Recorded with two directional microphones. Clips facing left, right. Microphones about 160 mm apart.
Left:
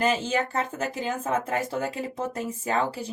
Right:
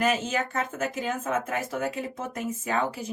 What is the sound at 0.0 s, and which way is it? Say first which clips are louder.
Speech: left 1 dB; 30° left (ahead or behind).